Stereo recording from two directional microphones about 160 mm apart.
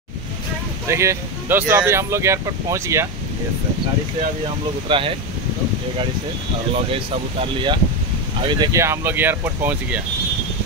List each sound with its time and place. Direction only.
0.8 s speech: 15° right (ahead or behind)
4.8 s speech: 35° right (ahead or behind)
7.3 s speech: 30° right (ahead or behind)
8.7 s speech: 15° right (ahead or behind)